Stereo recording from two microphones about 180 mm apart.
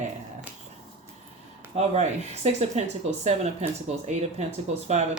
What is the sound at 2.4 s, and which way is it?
Speech, 40° right (ahead or behind).